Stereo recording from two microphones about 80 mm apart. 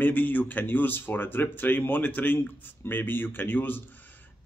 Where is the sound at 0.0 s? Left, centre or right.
Left.